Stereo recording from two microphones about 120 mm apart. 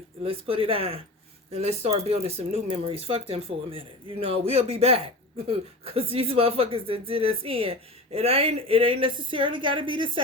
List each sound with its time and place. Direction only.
0.2 s speech: 50° right (ahead or behind)